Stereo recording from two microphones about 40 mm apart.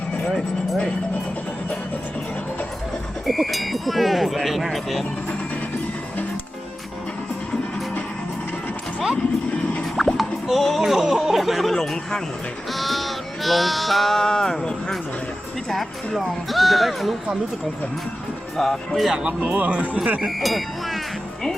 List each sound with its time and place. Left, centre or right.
3.2 s speech: centre
9.1 s music: left
9.8 s music: centre
10.4 s speech: centre
11.7 s speech: centre
12.7 s a sound: centre
14.3 s speech: centre
15.7 s speech: centre
18.5 s speech: centre
19.1 s speech: right
19.5 s speech: right
20.2 s speech: centre